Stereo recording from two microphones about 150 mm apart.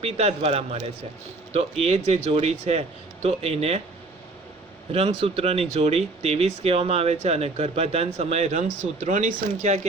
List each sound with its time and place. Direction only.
0.0 s speech: 45° right (ahead or behind)
4.9 s speech: 40° right (ahead or behind)